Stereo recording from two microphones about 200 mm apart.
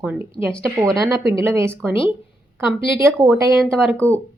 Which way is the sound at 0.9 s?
15° right (ahead or behind).